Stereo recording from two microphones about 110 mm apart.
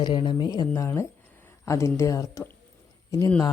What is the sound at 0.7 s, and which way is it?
Speech, 25° left (ahead or behind).